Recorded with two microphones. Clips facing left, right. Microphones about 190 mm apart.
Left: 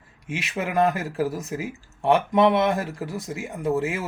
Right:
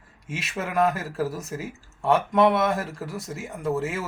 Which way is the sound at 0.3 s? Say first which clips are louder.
Left 3 dB; 15° left (ahead or behind).